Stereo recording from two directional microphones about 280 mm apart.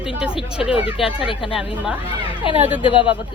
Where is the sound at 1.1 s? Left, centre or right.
Centre.